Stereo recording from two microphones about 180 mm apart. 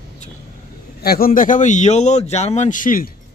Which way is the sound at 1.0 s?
55° left (ahead or behind).